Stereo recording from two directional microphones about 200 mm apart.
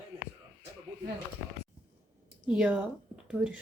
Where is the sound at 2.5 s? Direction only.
5° right (ahead or behind).